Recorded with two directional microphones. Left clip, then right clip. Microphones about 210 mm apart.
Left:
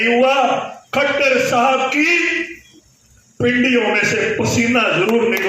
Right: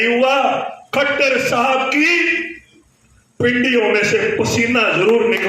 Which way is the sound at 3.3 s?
50° right (ahead or behind).